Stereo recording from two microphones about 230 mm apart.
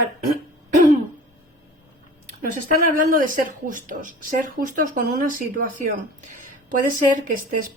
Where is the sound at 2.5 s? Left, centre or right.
Right.